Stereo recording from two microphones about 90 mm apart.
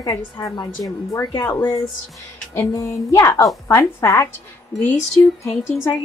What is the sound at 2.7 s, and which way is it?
Speech, 40° left (ahead or behind).